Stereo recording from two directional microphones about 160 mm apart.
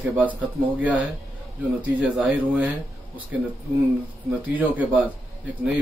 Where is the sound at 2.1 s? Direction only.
10° right (ahead or behind).